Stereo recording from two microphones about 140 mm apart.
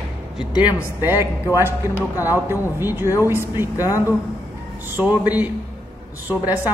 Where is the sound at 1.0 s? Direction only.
15° right (ahead or behind).